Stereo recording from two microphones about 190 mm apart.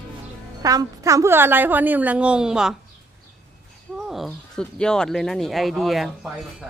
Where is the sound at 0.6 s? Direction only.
20° right (ahead or behind); by 2.7 s 5° right (ahead or behind).